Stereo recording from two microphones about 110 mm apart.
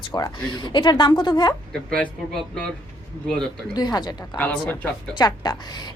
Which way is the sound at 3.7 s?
40° left (ahead or behind).